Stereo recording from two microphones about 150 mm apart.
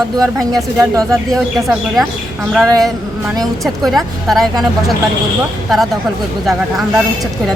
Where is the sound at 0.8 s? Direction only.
20° right (ahead or behind).